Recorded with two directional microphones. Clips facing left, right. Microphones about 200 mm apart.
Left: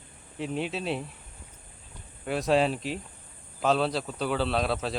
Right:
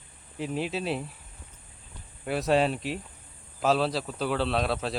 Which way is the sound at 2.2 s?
Centre (ahead or behind).